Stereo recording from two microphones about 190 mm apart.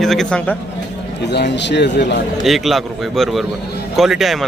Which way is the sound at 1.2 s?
65° left (ahead or behind).